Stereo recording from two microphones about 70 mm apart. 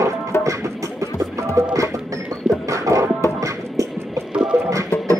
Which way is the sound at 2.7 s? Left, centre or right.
Right.